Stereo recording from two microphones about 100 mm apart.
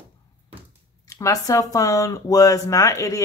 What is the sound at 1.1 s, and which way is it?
Speech, 35° left (ahead or behind).